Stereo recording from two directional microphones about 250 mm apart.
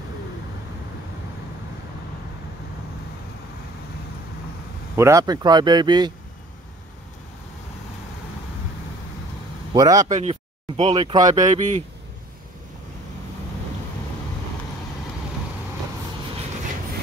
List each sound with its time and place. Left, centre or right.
4.9 s speech: centre
9.8 s speech: centre
10.0 s a man's voice: right
11.4 s a man's voice: right